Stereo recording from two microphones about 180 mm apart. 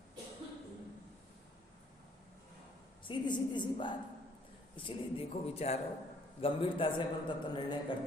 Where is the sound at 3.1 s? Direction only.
25° left (ahead or behind).